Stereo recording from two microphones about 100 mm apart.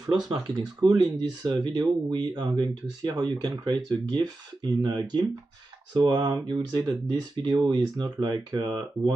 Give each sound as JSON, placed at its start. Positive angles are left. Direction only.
{"t": 0.3, "sound": "speech", "side_deg": -40}